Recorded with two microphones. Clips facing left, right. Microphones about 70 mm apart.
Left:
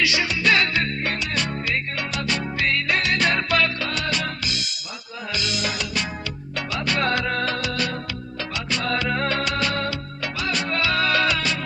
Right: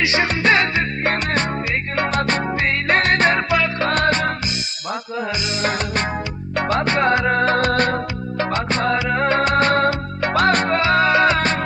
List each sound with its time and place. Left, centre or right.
0.0 s music: right
1.1 s music: right
3.8 s music: right
5.6 s music: right
6.9 s music: right
9.0 s music: centre
9.4 s music: right
10.8 s music: right